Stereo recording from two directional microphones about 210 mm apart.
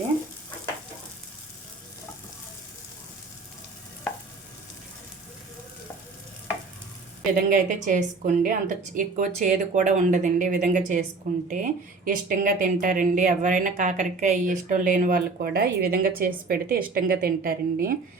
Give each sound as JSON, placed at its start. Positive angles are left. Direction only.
{"t": 7.3, "sound": "speech", "side_deg": -40}